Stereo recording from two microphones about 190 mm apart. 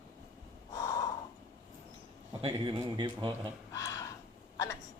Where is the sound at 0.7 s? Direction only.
20° left (ahead or behind).